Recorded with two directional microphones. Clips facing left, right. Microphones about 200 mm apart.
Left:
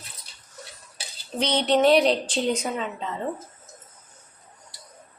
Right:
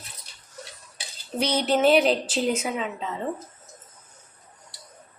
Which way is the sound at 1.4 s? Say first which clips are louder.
Left 1 dB; 5° right (ahead or behind).